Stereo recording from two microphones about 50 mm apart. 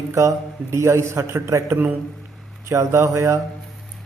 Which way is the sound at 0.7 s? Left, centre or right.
Right.